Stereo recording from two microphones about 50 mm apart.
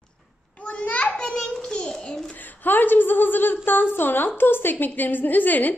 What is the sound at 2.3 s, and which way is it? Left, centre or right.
A woman's voice, left.